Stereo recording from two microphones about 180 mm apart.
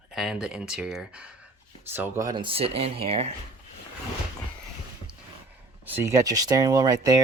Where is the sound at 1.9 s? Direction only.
15° right (ahead or behind); by 3.3 s 35° right (ahead or behind).